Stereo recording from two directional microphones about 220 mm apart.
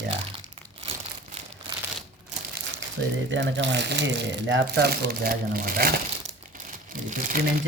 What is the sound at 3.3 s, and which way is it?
Speech, 55° right (ahead or behind).